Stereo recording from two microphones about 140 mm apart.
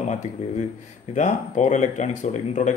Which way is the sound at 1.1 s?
60° left (ahead or behind).